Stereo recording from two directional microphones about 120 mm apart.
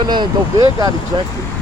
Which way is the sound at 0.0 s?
35° right (ahead or behind).